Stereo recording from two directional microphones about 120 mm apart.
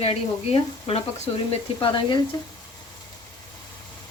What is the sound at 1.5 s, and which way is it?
Speech, 45° left (ahead or behind).